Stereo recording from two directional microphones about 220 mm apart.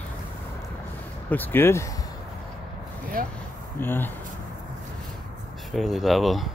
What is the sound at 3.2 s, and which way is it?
Speech, 40° right (ahead or behind).